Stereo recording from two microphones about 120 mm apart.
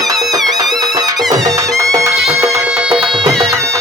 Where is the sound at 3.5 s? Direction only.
25° right (ahead or behind).